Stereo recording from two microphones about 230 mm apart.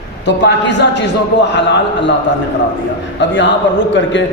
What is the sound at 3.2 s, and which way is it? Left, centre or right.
Speech, left.